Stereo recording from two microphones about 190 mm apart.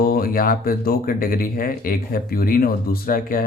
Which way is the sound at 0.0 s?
50° left (ahead or behind).